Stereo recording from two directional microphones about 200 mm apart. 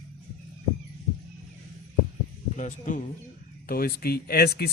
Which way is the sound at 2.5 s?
40° left (ahead or behind).